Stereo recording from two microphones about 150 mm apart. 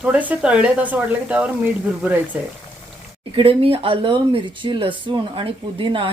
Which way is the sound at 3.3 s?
40° right (ahead or behind).